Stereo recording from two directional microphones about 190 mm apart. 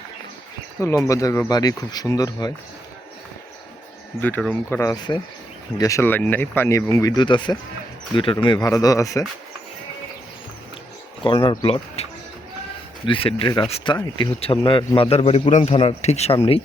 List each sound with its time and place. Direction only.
0.8 s speech: 15° left (ahead or behind)
4.2 s speech: 10° left (ahead or behind)
11.2 s speech: 25° left (ahead or behind)
13.1 s speech: 30° left (ahead or behind)